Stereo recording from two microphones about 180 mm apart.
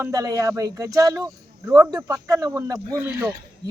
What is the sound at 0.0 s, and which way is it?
Speech, 20° right (ahead or behind).